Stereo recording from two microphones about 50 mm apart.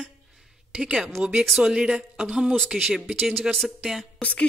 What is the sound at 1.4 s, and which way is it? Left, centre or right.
A woman's voice, centre.